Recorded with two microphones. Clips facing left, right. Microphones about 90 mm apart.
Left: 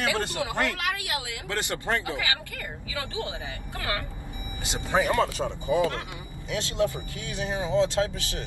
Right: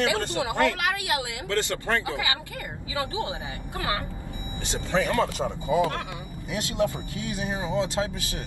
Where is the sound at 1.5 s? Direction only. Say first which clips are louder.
Right 2 dB; 20° left (ahead or behind).